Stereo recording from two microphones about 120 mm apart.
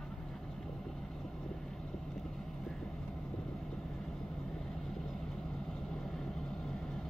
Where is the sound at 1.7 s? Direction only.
Centre (ahead or behind).